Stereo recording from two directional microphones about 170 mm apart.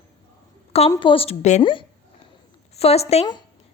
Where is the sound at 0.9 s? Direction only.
30° left (ahead or behind).